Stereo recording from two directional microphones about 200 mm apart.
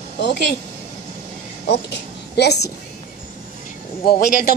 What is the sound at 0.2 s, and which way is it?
Speech, 55° left (ahead or behind).